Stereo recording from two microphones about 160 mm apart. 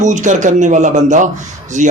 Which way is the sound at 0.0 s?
50° right (ahead or behind).